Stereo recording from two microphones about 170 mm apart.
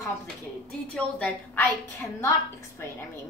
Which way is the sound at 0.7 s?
5° left (ahead or behind).